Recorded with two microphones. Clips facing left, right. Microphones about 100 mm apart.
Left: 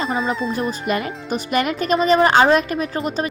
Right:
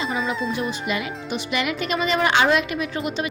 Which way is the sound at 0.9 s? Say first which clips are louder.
Left 4 dB; 45° left (ahead or behind).